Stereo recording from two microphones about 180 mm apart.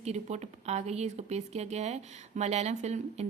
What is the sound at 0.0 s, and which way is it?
Speech, 40° right (ahead or behind).